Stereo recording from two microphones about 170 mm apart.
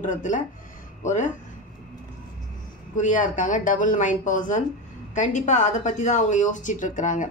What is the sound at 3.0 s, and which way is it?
Speech, 50° left (ahead or behind).